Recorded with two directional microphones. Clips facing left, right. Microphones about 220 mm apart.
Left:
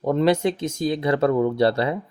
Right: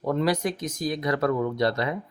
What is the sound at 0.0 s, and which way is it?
Speech, 25° left (ahead or behind).